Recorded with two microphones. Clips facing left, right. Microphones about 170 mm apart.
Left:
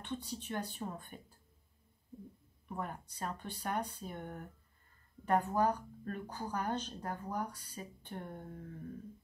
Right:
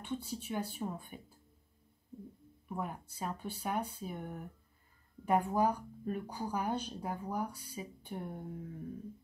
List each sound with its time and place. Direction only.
0.0 s a woman's voice: 10° right (ahead or behind)
2.7 s a woman's voice: 10° right (ahead or behind)